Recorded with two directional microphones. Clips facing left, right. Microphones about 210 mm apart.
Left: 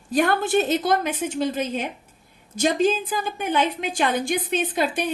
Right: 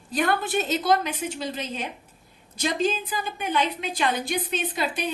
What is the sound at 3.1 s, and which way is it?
A woman's voice, 50° left (ahead or behind).